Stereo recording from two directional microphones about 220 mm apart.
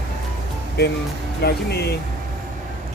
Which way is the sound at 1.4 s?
45° left (ahead or behind).